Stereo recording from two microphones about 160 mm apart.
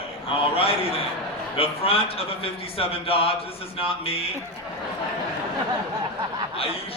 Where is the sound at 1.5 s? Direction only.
35° left (ahead or behind).